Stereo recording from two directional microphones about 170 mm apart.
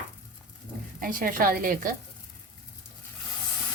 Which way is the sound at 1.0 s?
55° right (ahead or behind).